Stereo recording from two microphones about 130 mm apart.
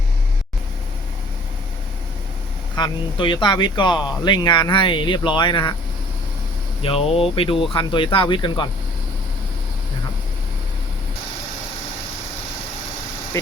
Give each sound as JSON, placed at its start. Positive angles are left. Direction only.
{"t": 2.7, "sound": "speech", "side_deg": 35}
{"t": 6.8, "sound": "speech", "side_deg": 50}
{"t": 13.3, "sound": "speech", "side_deg": 25}